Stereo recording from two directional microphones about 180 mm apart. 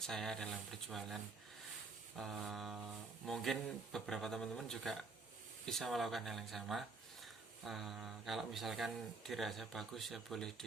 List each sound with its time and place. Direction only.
0.1 s speech: centre (ahead or behind)